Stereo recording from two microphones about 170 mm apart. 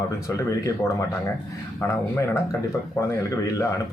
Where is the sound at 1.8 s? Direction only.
15° left (ahead or behind).